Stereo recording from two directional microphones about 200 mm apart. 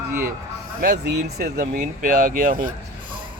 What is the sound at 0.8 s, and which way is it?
Speech, 55° right (ahead or behind).